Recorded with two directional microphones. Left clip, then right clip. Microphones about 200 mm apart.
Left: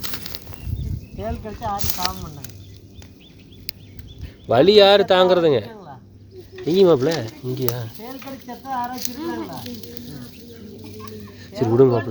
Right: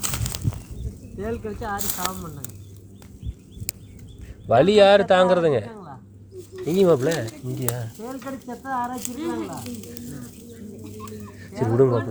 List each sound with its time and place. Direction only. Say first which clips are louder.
0.0 s bird flight: right 2 dB; 55° right (ahead or behind)
1.2 s speech: left 1 dB; centre (ahead or behind)
3.7 s a sound: left 1 dB; 60° right (ahead or behind)
4.4 s speech: left 2 dB; 25° left (ahead or behind)
5.7 s a sound: left 1 dB; 15° right (ahead or behind)
6.7 s speech: left 3 dB; 25° left (ahead or behind)
8.4 s speech: left 1 dB; 10° right (ahead or behind)
9.1 s speech: even; 20° right (ahead or behind)
11.3 s speech: left 4 dB; 20° left (ahead or behind)